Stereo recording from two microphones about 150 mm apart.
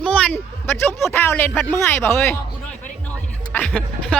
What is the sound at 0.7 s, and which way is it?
Speech, 15° left (ahead or behind).